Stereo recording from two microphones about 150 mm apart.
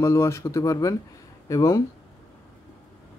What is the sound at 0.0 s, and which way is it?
Speech, 20° left (ahead or behind).